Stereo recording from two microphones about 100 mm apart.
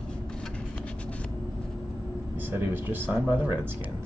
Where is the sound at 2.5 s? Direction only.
20° right (ahead or behind).